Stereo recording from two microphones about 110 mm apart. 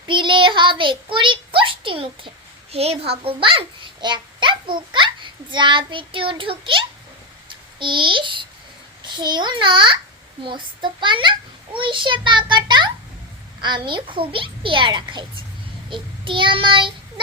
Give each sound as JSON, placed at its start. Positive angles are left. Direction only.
{"t": 0.1, "sound": "child singing", "side_deg": -50}
{"t": 2.7, "sound": "a child's voice", "side_deg": -65}